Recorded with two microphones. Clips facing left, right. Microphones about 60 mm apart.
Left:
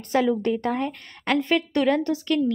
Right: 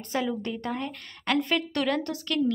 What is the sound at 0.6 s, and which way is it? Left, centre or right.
Speech, left.